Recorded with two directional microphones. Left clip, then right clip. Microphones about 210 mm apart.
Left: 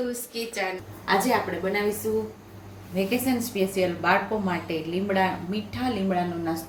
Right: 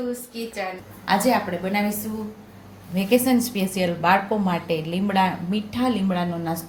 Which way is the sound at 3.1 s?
40° right (ahead or behind).